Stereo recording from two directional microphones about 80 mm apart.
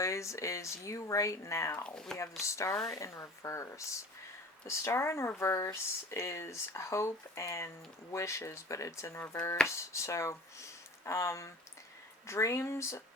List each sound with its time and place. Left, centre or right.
0.0 s speech: left